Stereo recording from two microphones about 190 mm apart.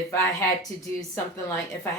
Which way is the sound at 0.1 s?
15° left (ahead or behind).